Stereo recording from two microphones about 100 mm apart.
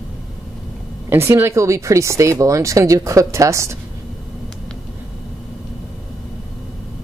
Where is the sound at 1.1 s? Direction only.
25° right (ahead or behind).